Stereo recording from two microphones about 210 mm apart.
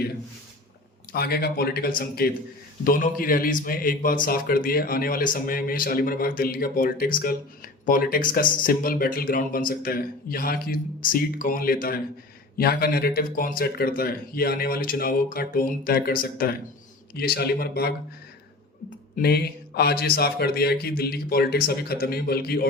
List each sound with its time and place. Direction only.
1.1 s a man's voice: 45° left (ahead or behind)
19.1 s a man's voice: 50° left (ahead or behind)